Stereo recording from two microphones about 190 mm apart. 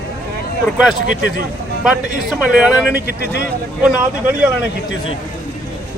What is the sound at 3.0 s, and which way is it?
Speech, 60° left (ahead or behind).